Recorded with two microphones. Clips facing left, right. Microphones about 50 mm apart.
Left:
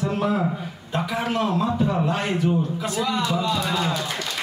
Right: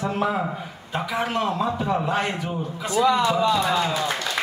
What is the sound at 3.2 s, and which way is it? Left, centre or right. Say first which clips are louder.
Speech: right 4 dB; right.